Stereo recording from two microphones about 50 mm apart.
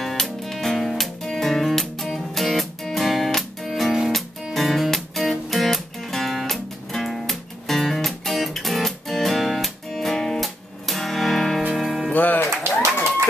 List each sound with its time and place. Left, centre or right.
0.0 s music: centre
11.7 s music: centre
12.1 s music: left